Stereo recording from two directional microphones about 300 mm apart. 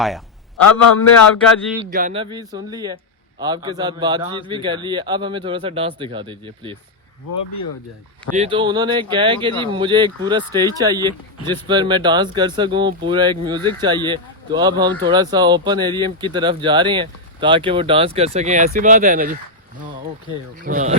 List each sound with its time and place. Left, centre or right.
0.5 s a man's voice: left
1.9 s speech: right
8.4 s speech: centre
20.7 s speech: right